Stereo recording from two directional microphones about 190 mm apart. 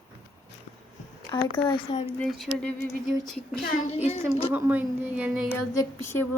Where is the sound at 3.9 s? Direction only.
35° left (ahead or behind).